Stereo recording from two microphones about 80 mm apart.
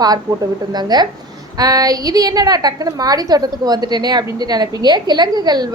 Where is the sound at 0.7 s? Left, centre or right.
Right.